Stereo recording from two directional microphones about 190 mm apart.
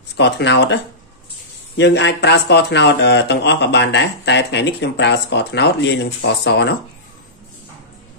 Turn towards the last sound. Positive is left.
turn(degrees=65)  # may be behind; listen again after turning